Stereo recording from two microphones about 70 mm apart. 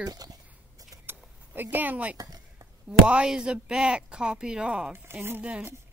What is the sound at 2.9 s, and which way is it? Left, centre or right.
Speech, centre.